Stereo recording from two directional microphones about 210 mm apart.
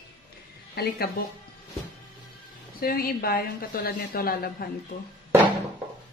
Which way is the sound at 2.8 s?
45° left (ahead or behind).